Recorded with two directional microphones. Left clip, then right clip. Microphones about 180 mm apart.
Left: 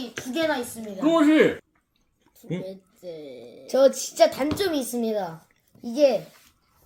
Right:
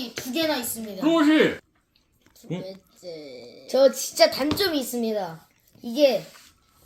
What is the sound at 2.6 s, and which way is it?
A woman's voice, 45° left (ahead or behind).